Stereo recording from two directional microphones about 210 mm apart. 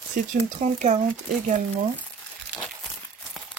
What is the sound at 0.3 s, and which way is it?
Speech, 35° right (ahead or behind).